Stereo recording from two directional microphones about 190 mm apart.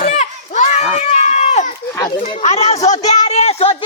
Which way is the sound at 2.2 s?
30° left (ahead or behind).